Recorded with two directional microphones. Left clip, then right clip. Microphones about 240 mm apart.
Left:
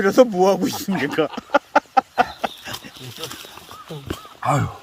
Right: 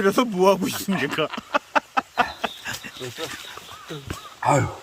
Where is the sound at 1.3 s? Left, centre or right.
Centre.